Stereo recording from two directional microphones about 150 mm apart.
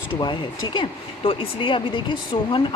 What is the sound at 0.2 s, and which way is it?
Speech, 30° left (ahead or behind).